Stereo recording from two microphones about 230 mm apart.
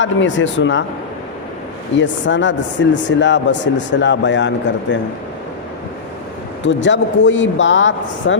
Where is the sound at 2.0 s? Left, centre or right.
Left.